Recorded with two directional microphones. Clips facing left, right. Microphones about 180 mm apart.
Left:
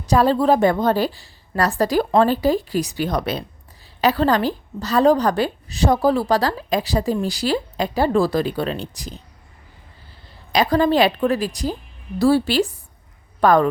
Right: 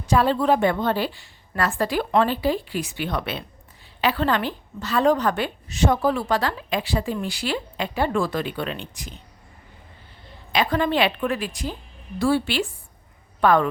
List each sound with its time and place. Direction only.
0.0 s a woman's voice: 40° left (ahead or behind)
10.5 s a woman's voice: 40° left (ahead or behind)